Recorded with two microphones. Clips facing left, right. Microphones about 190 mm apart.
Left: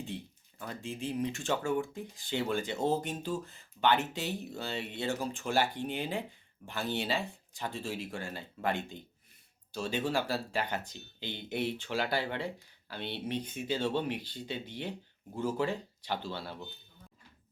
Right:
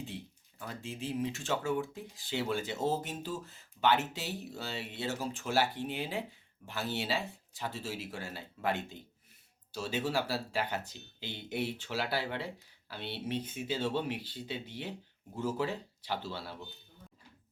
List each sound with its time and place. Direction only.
0.6 s speech: 5° right (ahead or behind)